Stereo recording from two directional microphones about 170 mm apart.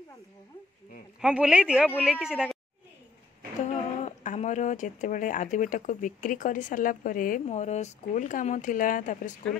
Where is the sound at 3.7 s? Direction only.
45° left (ahead or behind).